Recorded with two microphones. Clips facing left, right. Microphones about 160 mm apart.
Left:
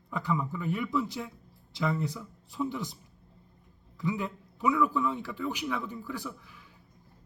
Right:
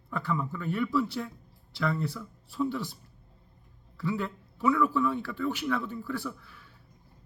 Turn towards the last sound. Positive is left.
turn(degrees=15)  # may be behind; listen again after turning